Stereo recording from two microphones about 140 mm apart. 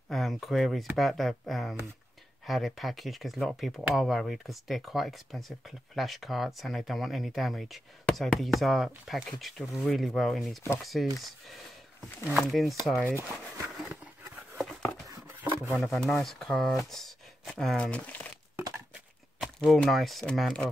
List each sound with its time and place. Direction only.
0.1 s speech: centre (ahead or behind)
12.3 s speech: centre (ahead or behind)
12.9 s speech: 15° right (ahead or behind)
15.0 s a sound: 15° right (ahead or behind)
16.1 s speech: 5° left (ahead or behind)
19.4 s speech: centre (ahead or behind)